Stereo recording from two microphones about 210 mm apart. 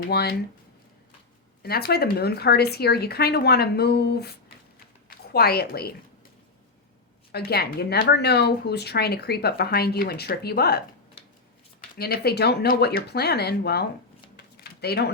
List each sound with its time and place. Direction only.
0.1 s speech: 50° left (ahead or behind)
1.6 s a woman's voice: 50° left (ahead or behind)
7.3 s speech: 50° left (ahead or behind)
14.3 s a sound: 50° left (ahead or behind)